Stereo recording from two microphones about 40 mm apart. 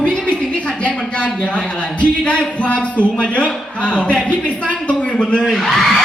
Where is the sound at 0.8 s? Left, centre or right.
Left.